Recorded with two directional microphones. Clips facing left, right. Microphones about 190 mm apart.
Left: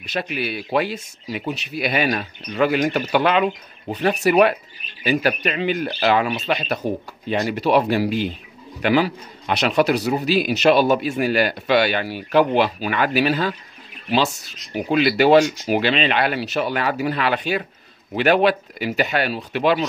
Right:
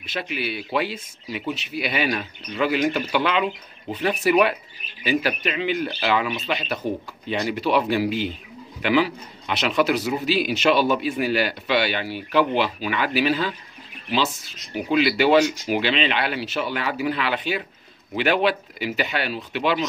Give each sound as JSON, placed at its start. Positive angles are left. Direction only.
{"t": 0.1, "sound": "a man's voice", "side_deg": 45}
{"t": 14.9, "sound": "a man's voice", "side_deg": 45}